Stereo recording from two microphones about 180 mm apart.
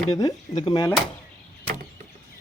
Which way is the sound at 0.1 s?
20° left (ahead or behind).